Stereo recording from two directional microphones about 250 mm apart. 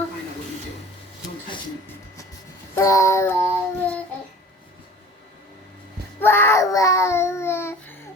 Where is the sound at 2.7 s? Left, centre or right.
Centre.